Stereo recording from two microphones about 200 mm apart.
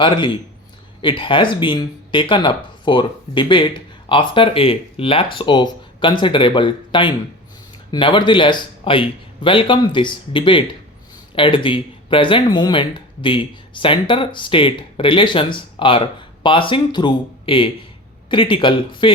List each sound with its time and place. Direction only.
0.0 s speech: 25° left (ahead or behind)